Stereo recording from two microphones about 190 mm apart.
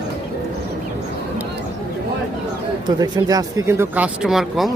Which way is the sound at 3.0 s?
20° right (ahead or behind).